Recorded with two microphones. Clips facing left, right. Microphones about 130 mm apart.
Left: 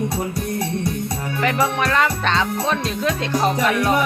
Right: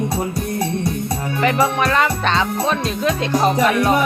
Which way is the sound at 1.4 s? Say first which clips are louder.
Right 3 dB; 25° right (ahead or behind).